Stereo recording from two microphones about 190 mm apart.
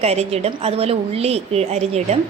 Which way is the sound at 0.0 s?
35° right (ahead or behind).